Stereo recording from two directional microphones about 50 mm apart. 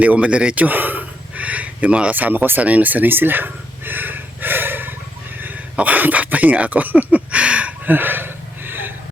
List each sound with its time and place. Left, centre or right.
0.0 s a sound: right
5.7 s speech: right
7.9 s gasp: right